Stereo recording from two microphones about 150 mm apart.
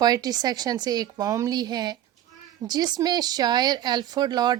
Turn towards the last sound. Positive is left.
turn(degrees=-30)  # may be behind; listen again after turning